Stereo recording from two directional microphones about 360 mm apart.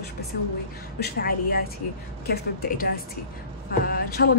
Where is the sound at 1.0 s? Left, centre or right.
Left.